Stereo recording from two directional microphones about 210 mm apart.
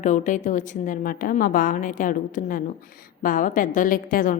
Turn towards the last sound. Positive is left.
turn(degrees=40)  # may be behind; listen again after turning